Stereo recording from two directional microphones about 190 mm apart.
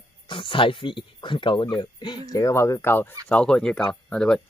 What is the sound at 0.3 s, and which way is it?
Speech, 25° left (ahead or behind).